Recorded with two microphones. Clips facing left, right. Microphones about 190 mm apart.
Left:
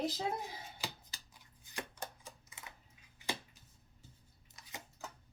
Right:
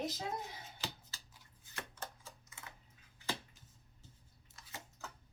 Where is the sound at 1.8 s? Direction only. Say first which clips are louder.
Left 3 dB; 15° left (ahead or behind).